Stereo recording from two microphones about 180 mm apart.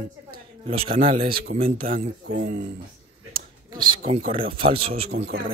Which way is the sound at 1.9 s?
50° right (ahead or behind).